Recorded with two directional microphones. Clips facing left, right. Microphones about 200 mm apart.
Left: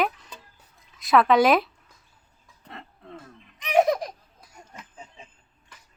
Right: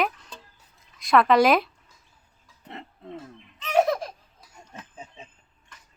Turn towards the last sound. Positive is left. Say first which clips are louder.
# right 2 dB
turn(degrees=-25)  # may be behind; listen again after turning